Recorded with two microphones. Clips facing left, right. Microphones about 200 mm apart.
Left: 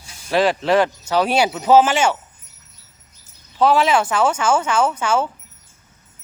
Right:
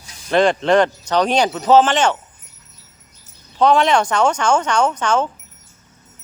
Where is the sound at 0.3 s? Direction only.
5° left (ahead or behind).